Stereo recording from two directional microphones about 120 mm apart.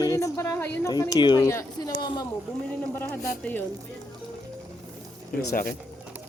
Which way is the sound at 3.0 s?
15° left (ahead or behind).